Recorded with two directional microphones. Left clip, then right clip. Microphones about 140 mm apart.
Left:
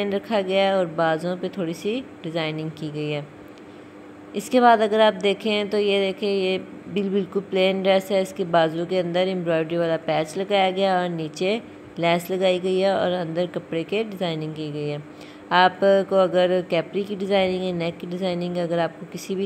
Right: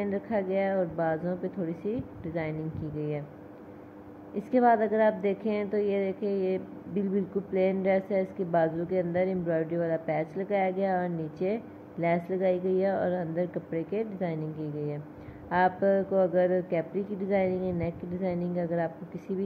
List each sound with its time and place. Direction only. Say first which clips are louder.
0.0 s a woman's voice: left 7 dB; 20° left (ahead or behind)
4.4 s a woman's voice: left 7 dB; 15° left (ahead or behind)